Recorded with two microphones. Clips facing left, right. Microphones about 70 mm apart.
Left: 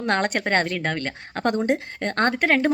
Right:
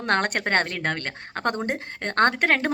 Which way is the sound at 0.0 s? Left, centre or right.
Right.